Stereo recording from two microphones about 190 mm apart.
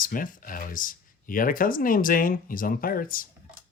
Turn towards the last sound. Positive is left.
turn(degrees=50)  # may be behind; listen again after turning